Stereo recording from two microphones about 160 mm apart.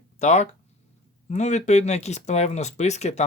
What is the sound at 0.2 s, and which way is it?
Speech, 45° left (ahead or behind).